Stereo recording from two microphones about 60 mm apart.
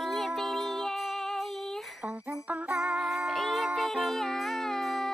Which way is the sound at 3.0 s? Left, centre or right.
Centre.